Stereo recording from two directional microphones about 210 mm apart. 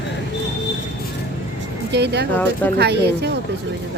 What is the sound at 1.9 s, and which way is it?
Speech, 55° right (ahead or behind).